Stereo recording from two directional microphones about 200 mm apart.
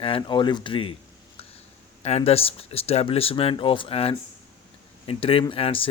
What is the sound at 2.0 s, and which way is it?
Speech, 30° left (ahead or behind).